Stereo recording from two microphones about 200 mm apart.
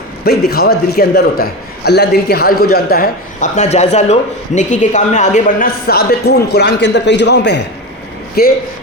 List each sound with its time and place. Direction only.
0.3 s a man's voice: 50° left (ahead or behind)